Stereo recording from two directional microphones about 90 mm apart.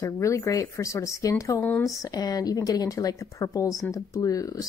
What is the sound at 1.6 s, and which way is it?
Speech, 20° left (ahead or behind).